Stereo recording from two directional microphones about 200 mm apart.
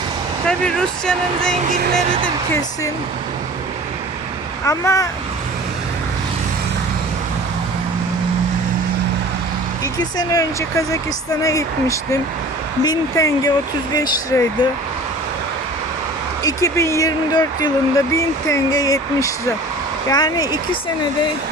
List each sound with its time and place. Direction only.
0.4 s speech: 5° left (ahead or behind)
4.6 s speech: 15° left (ahead or behind)
9.8 s speech: 20° left (ahead or behind)
16.4 s speech: 15° left (ahead or behind)